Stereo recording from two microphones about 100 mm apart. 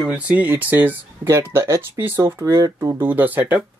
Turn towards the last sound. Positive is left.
turn(degrees=-15)  # may be behind; listen again after turning